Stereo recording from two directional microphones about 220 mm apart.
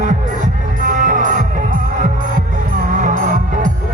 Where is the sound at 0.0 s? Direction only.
35° right (ahead or behind).